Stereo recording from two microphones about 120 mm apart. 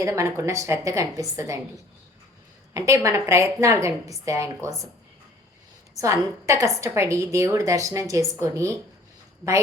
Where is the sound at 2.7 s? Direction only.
25° right (ahead or behind).